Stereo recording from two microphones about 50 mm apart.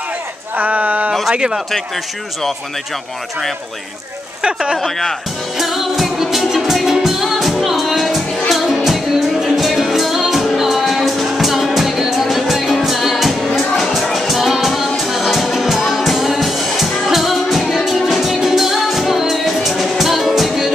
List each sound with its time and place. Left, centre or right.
0.6 s a sound: right
1.3 s speech: centre
4.4 s speech: centre
4.7 s speech: centre
5.6 s music: centre